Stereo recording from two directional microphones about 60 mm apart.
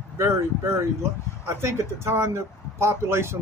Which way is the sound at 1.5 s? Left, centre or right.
Right.